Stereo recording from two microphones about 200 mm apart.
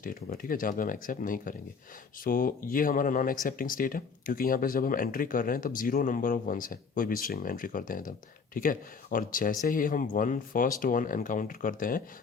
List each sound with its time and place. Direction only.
0.0 s speech: 45° left (ahead or behind)